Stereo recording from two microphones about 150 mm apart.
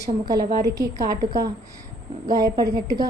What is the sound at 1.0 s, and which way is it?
Speech, 85° right.